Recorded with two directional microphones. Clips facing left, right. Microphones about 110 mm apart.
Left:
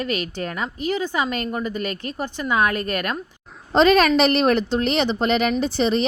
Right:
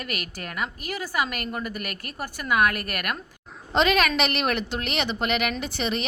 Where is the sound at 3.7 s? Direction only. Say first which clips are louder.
Left 6 dB; 35° left (ahead or behind).